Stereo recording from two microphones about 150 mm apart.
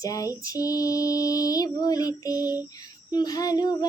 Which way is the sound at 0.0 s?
25° left (ahead or behind).